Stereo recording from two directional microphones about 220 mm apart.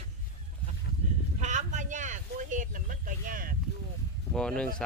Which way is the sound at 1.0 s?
30° right (ahead or behind).